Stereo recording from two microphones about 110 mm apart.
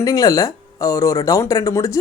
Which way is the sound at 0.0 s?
30° left (ahead or behind).